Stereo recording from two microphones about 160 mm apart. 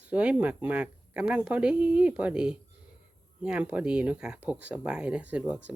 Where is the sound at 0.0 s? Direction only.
5° right (ahead or behind).